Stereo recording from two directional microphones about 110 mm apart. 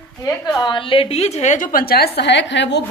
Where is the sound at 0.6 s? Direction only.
50° left (ahead or behind); by 1.6 s 80° left.